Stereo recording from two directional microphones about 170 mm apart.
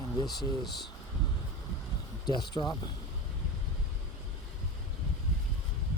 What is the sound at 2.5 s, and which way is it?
Speech, 25° left (ahead or behind).